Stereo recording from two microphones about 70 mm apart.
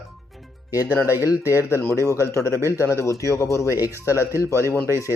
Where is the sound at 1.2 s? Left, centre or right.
Left.